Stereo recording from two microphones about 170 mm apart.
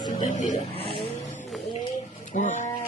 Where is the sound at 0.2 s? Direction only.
45° left (ahead or behind).